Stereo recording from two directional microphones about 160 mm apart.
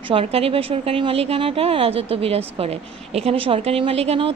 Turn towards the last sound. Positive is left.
turn(degrees=-40)  # may be behind; listen again after turning